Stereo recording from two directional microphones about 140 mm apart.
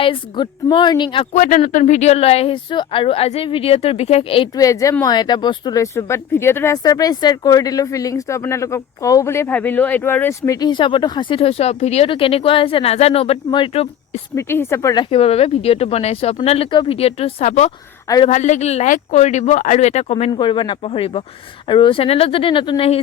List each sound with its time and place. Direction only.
0.0 s a woman's voice: 35° left (ahead or behind)
1.4 s speech: 65° left (ahead or behind); by 4.4 s 40° left (ahead or behind)
4.5 s speech: 25° left (ahead or behind); by 13.8 s 40° left (ahead or behind)
14.3 s speech: 15° left (ahead or behind)
15.1 s speech: 45° left (ahead or behind)
20.3 s a woman's voice: 35° left (ahead or behind)